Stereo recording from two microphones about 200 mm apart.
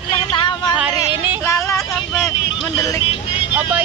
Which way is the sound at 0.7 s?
5° right (ahead or behind).